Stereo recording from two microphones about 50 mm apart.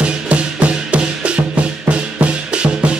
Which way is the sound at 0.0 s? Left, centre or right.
Right.